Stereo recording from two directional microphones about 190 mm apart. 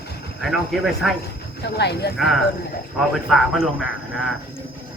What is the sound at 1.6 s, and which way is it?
Speech, 60° left (ahead or behind).